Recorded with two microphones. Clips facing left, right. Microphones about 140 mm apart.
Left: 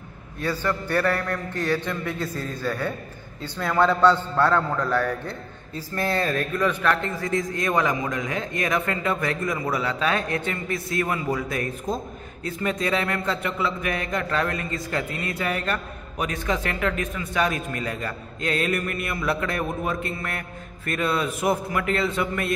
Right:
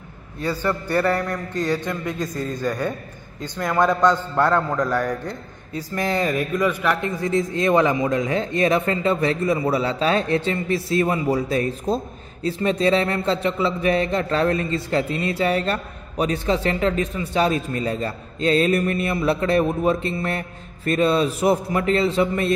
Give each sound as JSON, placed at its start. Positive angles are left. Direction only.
{"t": 0.4, "sound": "a man's voice", "side_deg": -10}